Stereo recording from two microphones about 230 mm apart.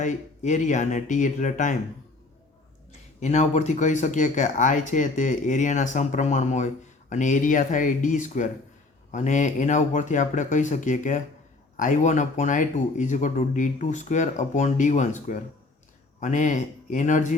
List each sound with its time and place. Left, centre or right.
0.0 s speech: left
2.9 s speech: left